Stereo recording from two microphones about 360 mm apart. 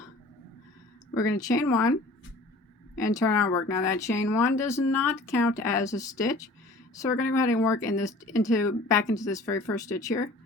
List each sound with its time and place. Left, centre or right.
1.1 s speech: centre
3.0 s speech: centre